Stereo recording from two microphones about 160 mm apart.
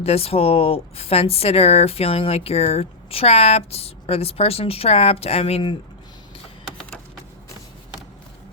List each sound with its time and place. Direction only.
0.0 s a woman's voice: 40° left (ahead or behind)